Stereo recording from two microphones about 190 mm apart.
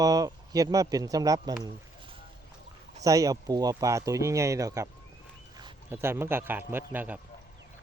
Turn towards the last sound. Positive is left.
turn(degrees=-10)  # may be behind; listen again after turning